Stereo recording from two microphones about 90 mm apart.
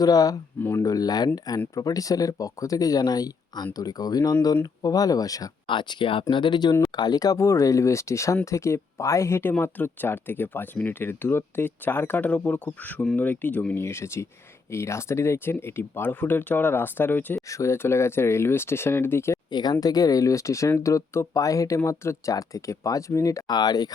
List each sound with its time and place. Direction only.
0.0 s speech: 45° left (ahead or behind)
5.6 s speech: 65° left (ahead or behind); by 17.4 s 25° left (ahead or behind)
17.5 s speech: 35° left (ahead or behind)
19.5 s speech: 50° left (ahead or behind); by 23.4 s 35° left (ahead or behind)
23.5 s speech: 50° left (ahead or behind)